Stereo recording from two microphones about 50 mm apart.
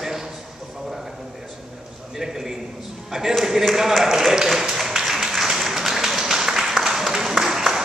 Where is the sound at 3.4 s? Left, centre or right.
Centre.